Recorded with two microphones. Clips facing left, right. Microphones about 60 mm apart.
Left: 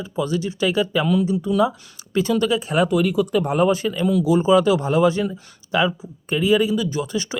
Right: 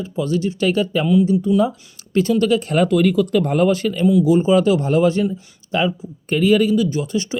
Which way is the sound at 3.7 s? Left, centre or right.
Left.